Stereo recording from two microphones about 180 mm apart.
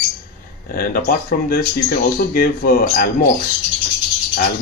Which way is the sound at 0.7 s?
55° left (ahead or behind).